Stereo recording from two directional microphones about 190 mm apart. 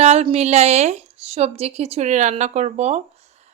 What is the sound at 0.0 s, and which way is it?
A woman's voice, 35° right (ahead or behind).